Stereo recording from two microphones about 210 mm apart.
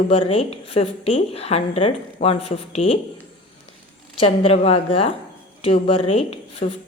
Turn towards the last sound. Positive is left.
turn(degrees=30)  # may be behind; listen again after turning